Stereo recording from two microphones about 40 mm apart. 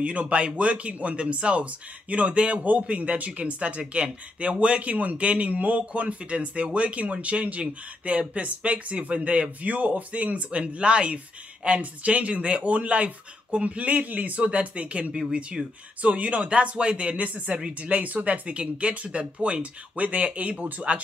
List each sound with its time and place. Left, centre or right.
0.0 s speech: right
16.0 s speech: right
17.3 s speech: right